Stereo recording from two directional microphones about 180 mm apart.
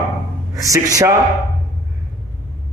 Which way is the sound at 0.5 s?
20° right (ahead or behind).